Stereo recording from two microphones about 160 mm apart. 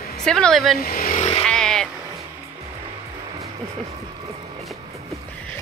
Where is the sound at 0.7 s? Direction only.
65° left (ahead or behind).